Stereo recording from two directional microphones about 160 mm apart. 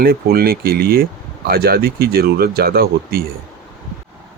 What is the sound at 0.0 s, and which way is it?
Speech, 70° right (ahead or behind).